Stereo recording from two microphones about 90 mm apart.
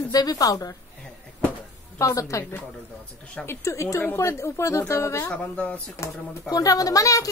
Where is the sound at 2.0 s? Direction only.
35° left (ahead or behind).